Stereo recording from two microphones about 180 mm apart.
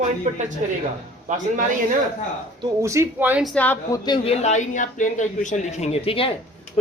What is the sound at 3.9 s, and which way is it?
Speech, 25° left (ahead or behind).